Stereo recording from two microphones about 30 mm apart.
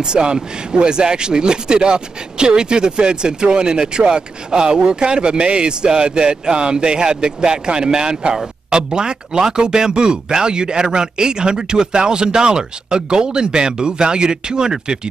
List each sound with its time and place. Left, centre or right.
0.0 s speech: right